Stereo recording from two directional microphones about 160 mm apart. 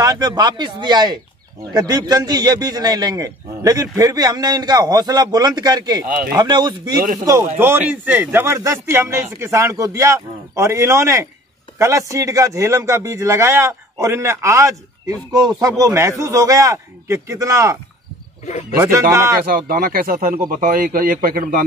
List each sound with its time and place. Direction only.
0.0 s a man's voice: 25° right (ahead or behind)
7.5 s a man's voice: 10° right (ahead or behind)
18.4 s speech: 50° left (ahead or behind)
18.8 s a man's voice: 20° right (ahead or behind)
19.4 s a man's voice: 65° right (ahead or behind)